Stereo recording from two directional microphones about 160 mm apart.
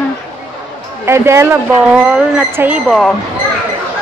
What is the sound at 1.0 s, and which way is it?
A woman's voice, 15° right (ahead or behind).